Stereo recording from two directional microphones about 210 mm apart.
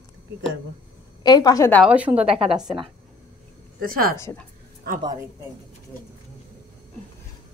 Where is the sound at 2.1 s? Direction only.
30° right (ahead or behind).